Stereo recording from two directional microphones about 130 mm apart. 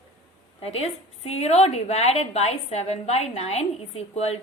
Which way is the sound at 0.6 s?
50° left (ahead or behind).